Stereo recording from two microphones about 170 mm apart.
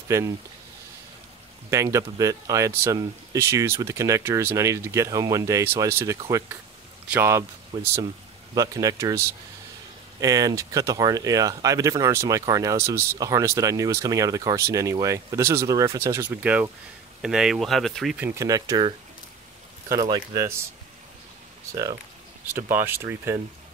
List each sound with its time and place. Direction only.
1.7 s speech: 20° right (ahead or behind); by 18.2 s centre (ahead or behind)
18.2 s speech: 15° right (ahead or behind)
22.5 s speech: 15° right (ahead or behind)